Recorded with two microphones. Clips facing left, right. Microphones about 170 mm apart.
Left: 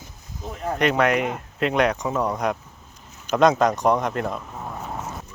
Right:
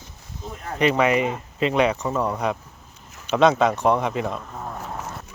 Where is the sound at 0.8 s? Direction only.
5° right (ahead or behind).